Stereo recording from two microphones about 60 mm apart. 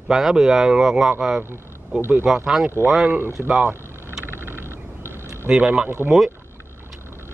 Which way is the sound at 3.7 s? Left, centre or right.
Right.